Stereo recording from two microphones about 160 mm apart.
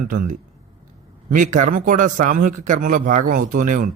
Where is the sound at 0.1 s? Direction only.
60° right (ahead or behind).